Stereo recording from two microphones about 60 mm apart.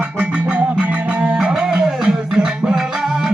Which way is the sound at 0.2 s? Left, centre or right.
Right.